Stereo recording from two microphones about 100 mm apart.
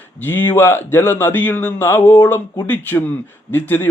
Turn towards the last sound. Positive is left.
turn(degrees=20)  # may be behind; listen again after turning